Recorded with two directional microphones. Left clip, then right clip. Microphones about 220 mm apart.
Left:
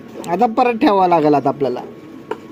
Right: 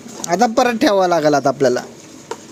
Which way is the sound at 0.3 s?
30° right (ahead or behind).